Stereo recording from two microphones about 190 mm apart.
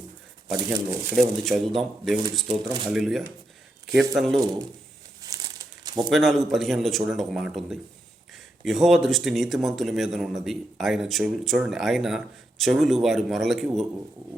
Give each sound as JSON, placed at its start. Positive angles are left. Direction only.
{"t": 0.5, "sound": "speech", "side_deg": -20}
{"t": 1.1, "sound": "speech", "side_deg": 0}
{"t": 2.5, "sound": "speech", "side_deg": -25}
{"t": 2.9, "sound": "speech", "side_deg": 0}
{"t": 5.2, "sound": "crumpling", "side_deg": -20}
{"t": 6.1, "sound": "speech", "side_deg": 0}